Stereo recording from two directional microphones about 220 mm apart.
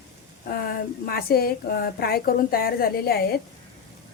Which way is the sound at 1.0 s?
45° left (ahead or behind).